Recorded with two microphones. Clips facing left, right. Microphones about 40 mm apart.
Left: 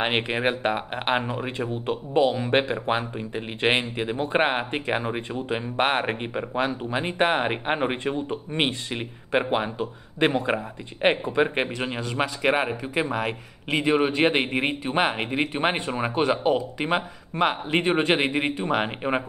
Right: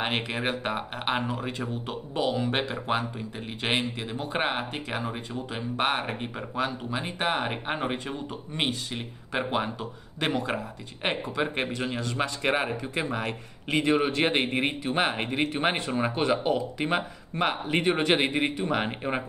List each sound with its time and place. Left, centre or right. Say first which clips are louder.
0.0 s speech: left 5 dB; left